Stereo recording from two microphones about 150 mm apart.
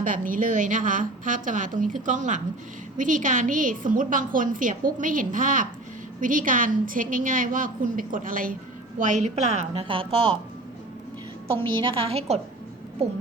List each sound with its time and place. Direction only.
0.0 s a woman's voice: 65° right (ahead or behind)
9.0 s a woman's voice: 55° right (ahead or behind); by 10.3 s 35° right (ahead or behind)
11.5 s a woman's voice: 35° right (ahead or behind)